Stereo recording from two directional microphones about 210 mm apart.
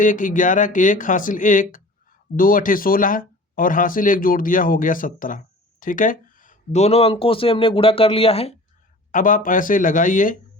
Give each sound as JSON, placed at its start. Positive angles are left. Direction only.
{"t": 0.0, "sound": "speech", "side_deg": 40}
{"t": 9.1, "sound": "speech", "side_deg": 40}